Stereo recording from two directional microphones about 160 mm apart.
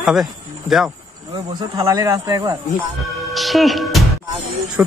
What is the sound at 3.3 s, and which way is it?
Speech, centre (ahead or behind).